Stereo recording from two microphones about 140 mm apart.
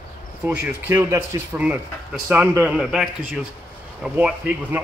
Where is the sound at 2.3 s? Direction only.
10° right (ahead or behind).